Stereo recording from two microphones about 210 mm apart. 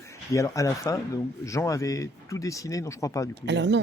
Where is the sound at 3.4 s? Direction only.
55° right (ahead or behind).